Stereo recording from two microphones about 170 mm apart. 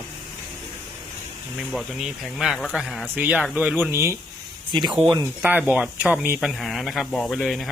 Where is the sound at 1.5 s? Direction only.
Centre (ahead or behind).